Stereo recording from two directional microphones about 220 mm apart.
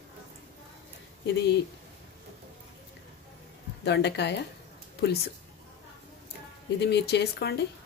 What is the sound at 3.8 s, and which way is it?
Speech, 50° left (ahead or behind).